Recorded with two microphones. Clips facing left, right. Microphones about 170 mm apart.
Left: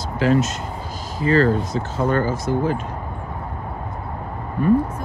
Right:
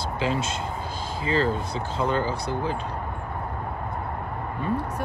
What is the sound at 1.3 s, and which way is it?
Speech, 45° left (ahead or behind).